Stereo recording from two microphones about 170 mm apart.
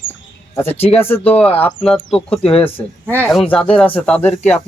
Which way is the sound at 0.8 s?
35° left (ahead or behind).